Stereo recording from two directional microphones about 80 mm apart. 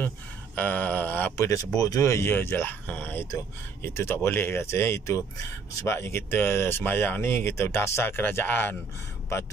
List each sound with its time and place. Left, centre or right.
0.6 s speech: left
1.3 s speech: left
3.3 s speech: left